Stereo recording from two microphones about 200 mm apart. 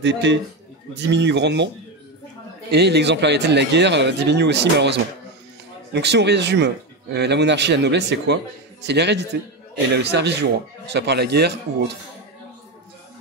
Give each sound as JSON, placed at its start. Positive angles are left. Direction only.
{"t": 0.0, "sound": "speech", "side_deg": -60}
{"t": 2.7, "sound": "speech", "side_deg": -55}